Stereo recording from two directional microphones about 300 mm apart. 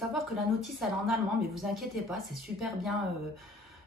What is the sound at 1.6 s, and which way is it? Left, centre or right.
Speech, centre.